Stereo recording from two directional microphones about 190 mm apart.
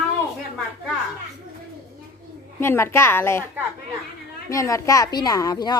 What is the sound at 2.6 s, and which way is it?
Speech, 10° left (ahead or behind).